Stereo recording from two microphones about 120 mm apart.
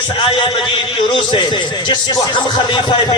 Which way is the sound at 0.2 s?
45° left (ahead or behind).